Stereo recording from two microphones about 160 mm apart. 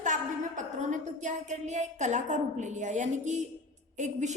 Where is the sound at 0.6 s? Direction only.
50° right (ahead or behind).